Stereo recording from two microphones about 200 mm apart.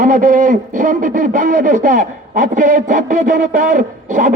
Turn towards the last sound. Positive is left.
turn(degrees=-40)  # may be behind; listen again after turning